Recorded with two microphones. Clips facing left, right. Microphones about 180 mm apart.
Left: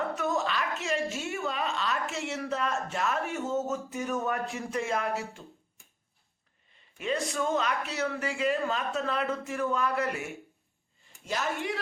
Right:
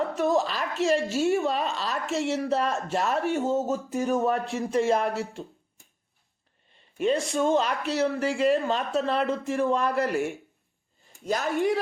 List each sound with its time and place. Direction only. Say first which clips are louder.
0.2 s a woman's voice: right 5 dB; 35° right (ahead or behind)
7.0 s a woman's voice: right 6 dB; 30° right (ahead or behind)
11.3 s speech: right 7 dB; 40° right (ahead or behind)